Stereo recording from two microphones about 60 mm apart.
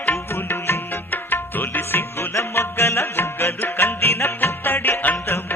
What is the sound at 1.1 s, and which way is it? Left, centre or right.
Music, left.